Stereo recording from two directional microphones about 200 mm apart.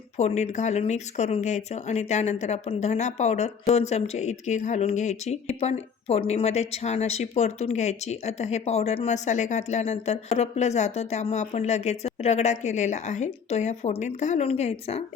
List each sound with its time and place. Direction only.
0.2 s speech: 35° left (ahead or behind)